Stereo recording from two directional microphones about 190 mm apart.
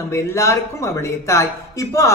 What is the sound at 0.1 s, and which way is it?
Speech, 15° left (ahead or behind).